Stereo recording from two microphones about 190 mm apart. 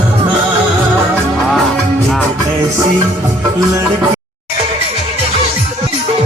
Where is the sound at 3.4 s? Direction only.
15° right (ahead or behind).